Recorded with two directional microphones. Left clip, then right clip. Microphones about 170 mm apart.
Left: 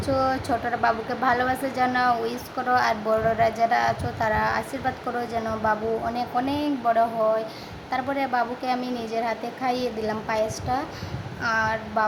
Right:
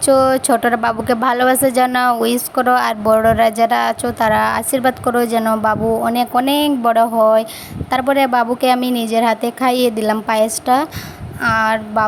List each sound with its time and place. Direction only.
0.0 s a woman's voice: 60° right (ahead or behind)